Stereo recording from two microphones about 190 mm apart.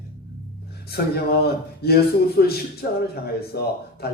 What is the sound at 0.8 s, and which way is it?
Speech, 55° left (ahead or behind).